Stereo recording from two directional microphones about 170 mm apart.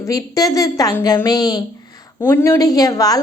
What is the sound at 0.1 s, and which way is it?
A woman's voice, 20° left (ahead or behind).